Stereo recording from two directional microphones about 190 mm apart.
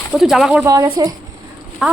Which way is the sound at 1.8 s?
5° right (ahead or behind).